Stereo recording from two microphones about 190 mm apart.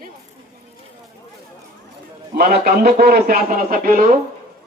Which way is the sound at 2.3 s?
55° right (ahead or behind).